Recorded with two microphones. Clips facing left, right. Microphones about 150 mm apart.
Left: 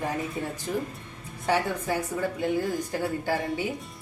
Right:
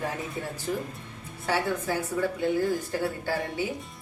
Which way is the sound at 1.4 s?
15° left (ahead or behind).